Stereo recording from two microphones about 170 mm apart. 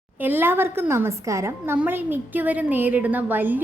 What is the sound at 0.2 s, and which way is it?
A woman's voice, 10° right (ahead or behind).